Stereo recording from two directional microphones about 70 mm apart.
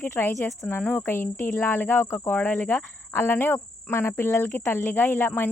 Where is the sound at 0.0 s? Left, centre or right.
Left.